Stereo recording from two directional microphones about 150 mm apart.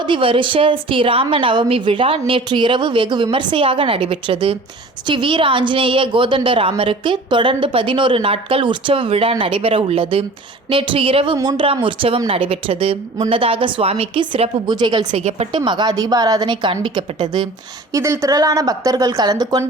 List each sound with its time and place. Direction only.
0.0 s a woman's voice: 35° right (ahead or behind)
15.2 s speech: 50° right (ahead or behind)
15.5 s a woman's voice: 30° right (ahead or behind)
17.9 s speech: 20° right (ahead or behind)